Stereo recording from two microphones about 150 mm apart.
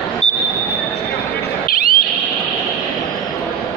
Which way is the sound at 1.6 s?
75° left (ahead or behind).